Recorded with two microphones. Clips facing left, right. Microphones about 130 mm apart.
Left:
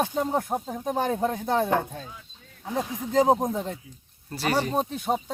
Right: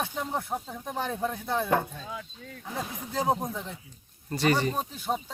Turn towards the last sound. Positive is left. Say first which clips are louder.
# left 4 dB
turn(degrees=60)  # may be behind; listen again after turning